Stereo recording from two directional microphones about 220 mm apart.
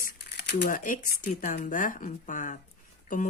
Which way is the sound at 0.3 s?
50° left (ahead or behind).